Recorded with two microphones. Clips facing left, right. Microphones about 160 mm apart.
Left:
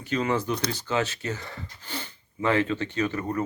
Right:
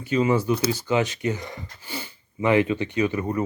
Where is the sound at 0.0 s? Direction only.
10° right (ahead or behind).